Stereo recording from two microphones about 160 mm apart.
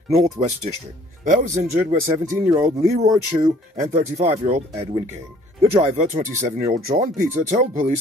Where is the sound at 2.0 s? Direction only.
20° right (ahead or behind).